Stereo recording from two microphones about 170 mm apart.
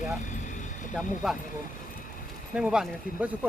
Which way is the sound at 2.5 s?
5° right (ahead or behind).